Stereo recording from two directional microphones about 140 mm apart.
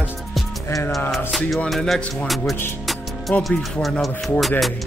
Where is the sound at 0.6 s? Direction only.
20° left (ahead or behind).